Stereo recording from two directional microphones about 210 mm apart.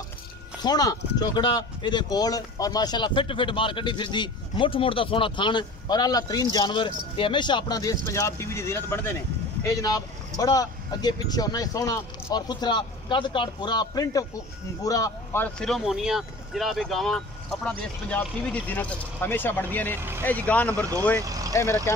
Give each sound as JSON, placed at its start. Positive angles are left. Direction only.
{"t": 0.6, "sound": "speech", "side_deg": 20}
{"t": 20.0, "sound": "speech", "side_deg": -10}
{"t": 20.2, "sound": "speech", "side_deg": 5}
{"t": 21.2, "sound": "speech", "side_deg": -15}
{"t": 21.5, "sound": "speech", "side_deg": 15}